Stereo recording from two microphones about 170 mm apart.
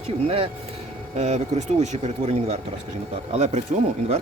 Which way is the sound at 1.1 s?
40° right (ahead or behind).